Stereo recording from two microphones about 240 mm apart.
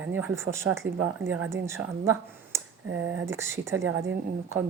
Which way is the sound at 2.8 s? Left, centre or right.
Right.